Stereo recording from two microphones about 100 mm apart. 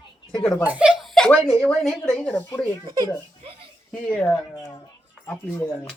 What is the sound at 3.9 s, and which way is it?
Speech, 10° left (ahead or behind).